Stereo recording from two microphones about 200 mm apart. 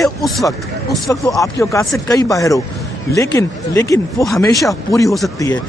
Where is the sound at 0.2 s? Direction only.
Centre (ahead or behind).